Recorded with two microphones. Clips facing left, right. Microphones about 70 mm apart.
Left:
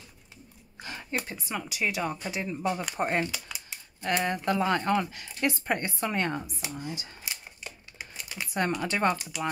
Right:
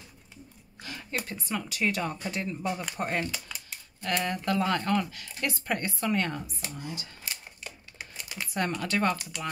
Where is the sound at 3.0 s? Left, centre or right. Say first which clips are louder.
Left 3 dB; left.